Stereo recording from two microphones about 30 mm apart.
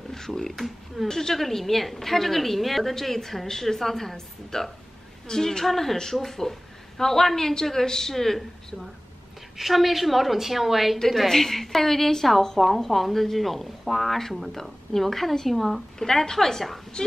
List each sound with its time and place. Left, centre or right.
0.1 s a sound: centre
0.6 s a woman's voice: centre
1.0 s a woman's voice: centre
1.4 s a woman's voice: centre
5.7 s a woman's voice: centre
9.6 s a woman's voice: centre
11.1 s a woman's voice: centre
17.0 s speech: left